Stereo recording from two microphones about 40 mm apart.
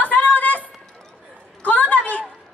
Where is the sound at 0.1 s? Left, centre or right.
Left.